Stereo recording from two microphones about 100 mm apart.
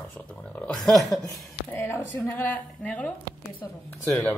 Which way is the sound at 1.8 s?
25° left (ahead or behind).